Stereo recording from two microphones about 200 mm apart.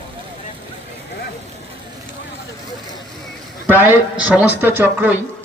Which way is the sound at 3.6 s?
10° right (ahead or behind).